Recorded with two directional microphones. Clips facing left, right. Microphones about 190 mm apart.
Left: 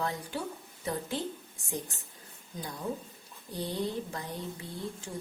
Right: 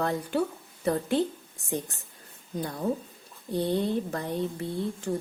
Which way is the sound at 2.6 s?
60° right (ahead or behind).